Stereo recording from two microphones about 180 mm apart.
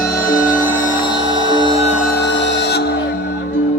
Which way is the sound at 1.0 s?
25° left (ahead or behind).